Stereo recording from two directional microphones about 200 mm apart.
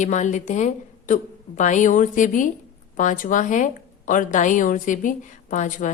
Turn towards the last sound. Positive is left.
turn(degrees=40)  # may be behind; listen again after turning